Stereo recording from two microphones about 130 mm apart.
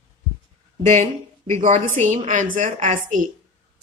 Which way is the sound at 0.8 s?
65° right (ahead or behind).